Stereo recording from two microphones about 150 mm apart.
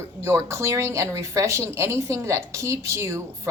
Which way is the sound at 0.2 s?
20° right (ahead or behind).